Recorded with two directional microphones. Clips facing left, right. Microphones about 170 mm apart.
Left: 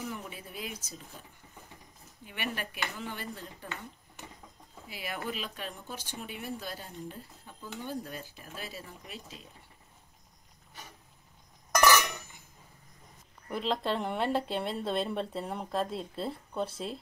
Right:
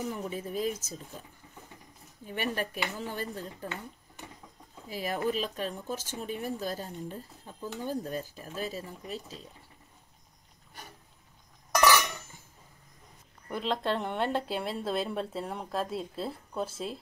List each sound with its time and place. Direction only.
0.3 s speech: 40° right (ahead or behind)
2.2 s speech: 40° right (ahead or behind)
4.8 s speech: 40° right (ahead or behind)
11.7 s a sound: 15° right (ahead or behind)
13.5 s speech: centre (ahead or behind)